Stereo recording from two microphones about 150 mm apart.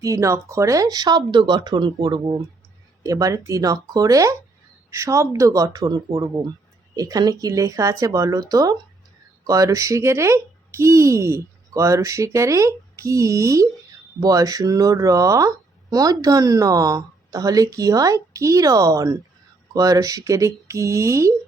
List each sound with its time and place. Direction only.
0.0 s speech: 20° right (ahead or behind)